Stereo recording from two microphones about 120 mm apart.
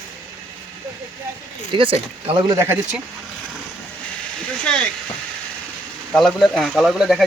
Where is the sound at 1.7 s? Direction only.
50° right (ahead or behind).